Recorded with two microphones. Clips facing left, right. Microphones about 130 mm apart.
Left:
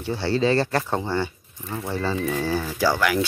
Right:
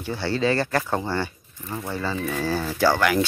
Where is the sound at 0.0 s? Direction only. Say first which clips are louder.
Left 2 dB; 30° left (ahead or behind).